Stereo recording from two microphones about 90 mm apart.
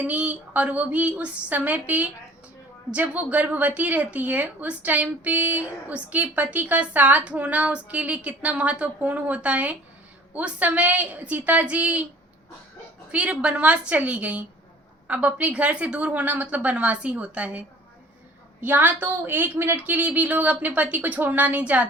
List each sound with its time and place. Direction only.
0.0 s a woman's voice: 15° right (ahead or behind)
13.1 s a woman's voice: 15° right (ahead or behind)
18.6 s a woman's voice: 20° right (ahead or behind)